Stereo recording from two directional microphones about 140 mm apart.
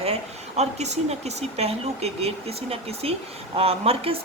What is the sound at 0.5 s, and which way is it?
Speech, 50° right (ahead or behind).